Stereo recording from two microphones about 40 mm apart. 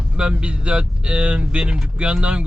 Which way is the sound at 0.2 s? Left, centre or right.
Right.